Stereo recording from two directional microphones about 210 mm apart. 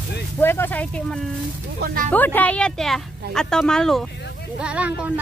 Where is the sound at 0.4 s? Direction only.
10° left (ahead or behind).